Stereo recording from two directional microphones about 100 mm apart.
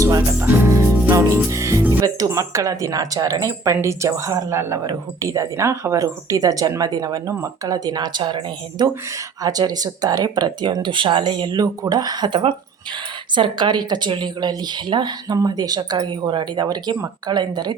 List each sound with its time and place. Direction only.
0.3 s music: 20° right (ahead or behind)
1.1 s speech: 30° right (ahead or behind); by 8.9 s 50° right (ahead or behind)
9.4 s speech: 40° right (ahead or behind)